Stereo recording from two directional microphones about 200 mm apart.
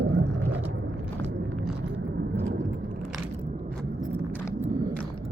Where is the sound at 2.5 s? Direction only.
40° right (ahead or behind).